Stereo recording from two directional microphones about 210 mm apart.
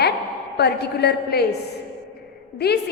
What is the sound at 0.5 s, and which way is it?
Speech, 50° left (ahead or behind).